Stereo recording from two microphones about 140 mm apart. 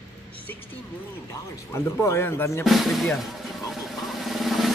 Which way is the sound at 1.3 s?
20° left (ahead or behind).